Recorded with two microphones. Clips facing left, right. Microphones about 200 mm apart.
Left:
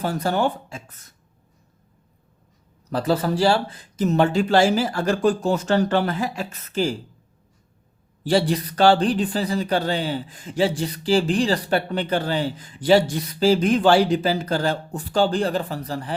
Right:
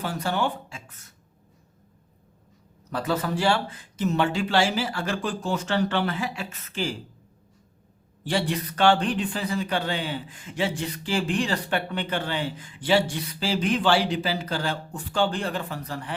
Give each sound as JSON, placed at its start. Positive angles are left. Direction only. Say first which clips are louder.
{"t": 0.0, "sound": "speech", "louder": "left 5 dB", "side_deg": 40}
{"t": 2.9, "sound": "speech", "louder": "left 5 dB", "side_deg": 35}
{"t": 8.2, "sound": "speech", "louder": "left 6 dB", "side_deg": 35}